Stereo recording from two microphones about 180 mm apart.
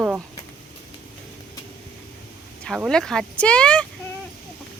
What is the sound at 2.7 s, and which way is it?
Speech, centre (ahead or behind).